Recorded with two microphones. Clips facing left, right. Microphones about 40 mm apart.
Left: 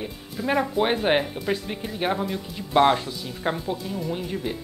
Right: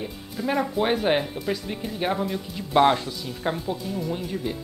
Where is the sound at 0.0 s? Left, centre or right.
Centre.